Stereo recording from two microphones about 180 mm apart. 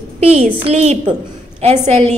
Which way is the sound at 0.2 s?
35° right (ahead or behind).